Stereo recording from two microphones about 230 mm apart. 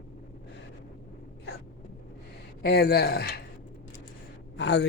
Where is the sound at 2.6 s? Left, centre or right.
Left.